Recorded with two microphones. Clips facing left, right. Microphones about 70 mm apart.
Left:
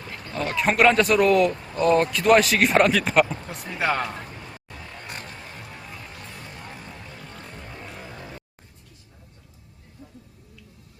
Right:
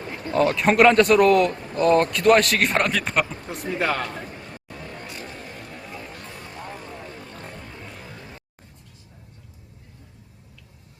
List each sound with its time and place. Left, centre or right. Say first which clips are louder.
0.3 s a man's voice: right 4 dB; centre
5.7 s music: right 3 dB; centre
7.2 s a sound: right 2 dB; right
7.7 s music: left 1 dB; left